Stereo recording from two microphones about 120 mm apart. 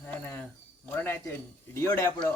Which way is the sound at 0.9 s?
15° left (ahead or behind).